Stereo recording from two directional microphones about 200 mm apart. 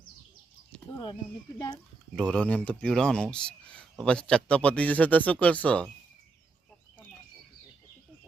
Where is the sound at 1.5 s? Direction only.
20° left (ahead or behind).